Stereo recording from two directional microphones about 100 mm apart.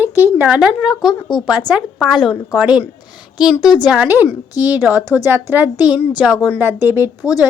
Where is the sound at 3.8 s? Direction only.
15° right (ahead or behind).